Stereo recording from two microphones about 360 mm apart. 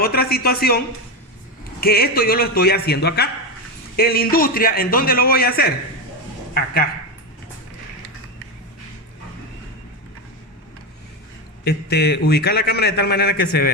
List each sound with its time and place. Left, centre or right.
0.0 s a man's voice: left
1.8 s a man's voice: left
11.6 s a man's voice: left